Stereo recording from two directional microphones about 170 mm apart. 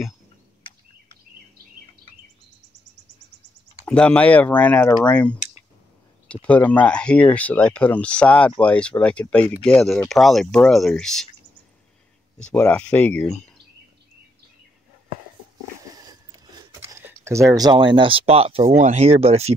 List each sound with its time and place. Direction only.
3.8 s speech: 5° left (ahead or behind)
6.4 s speech: 10° left (ahead or behind)
12.4 s speech: 5° left (ahead or behind)
16.0 s a sound: 20° right (ahead or behind)
18.8 s speech: 40° right (ahead or behind)